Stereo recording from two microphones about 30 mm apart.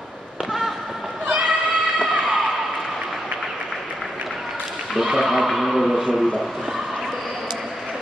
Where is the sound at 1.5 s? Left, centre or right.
Right.